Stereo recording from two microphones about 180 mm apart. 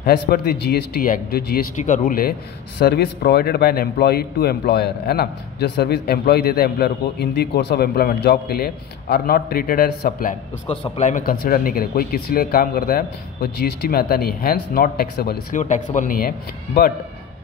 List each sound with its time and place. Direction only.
0.0 s speech: 60° left (ahead or behind)
2.8 s speech: 60° left (ahead or behind)
15.5 s speech: 45° left (ahead or behind)